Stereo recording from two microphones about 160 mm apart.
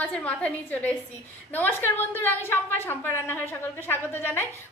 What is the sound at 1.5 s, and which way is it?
A woman's voice, 15° left (ahead or behind).